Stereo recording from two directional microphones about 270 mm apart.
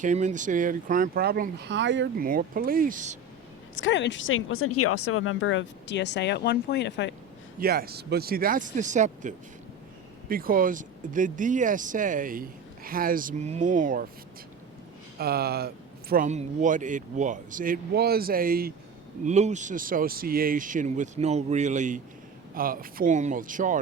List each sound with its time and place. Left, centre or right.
0.0 s speech: right
3.8 s speech: left
7.6 s speech: right
15.2 s speech: right